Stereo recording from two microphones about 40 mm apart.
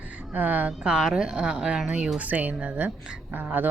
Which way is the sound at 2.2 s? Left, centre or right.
Right.